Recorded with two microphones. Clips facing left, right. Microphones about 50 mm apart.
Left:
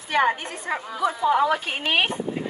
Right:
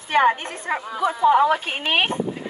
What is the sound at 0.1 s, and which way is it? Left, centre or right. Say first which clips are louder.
Speech: right 3 dB; right.